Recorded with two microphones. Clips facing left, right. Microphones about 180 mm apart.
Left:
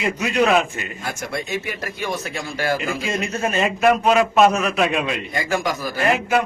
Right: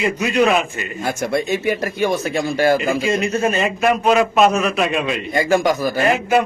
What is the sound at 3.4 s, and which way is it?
A man's voice, 10° right (ahead or behind).